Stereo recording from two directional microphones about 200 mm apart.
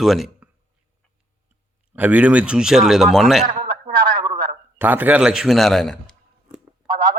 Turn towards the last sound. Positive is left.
turn(degrees=-20)  # may be behind; listen again after turning